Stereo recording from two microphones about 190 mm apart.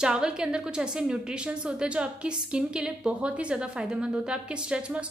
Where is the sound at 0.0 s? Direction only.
5° right (ahead or behind).